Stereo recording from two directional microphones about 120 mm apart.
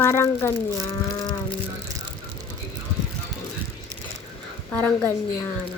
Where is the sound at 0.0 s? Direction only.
20° left (ahead or behind).